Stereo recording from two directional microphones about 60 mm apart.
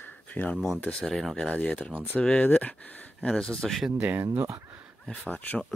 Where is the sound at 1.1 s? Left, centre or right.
Centre; by 3.3 s left.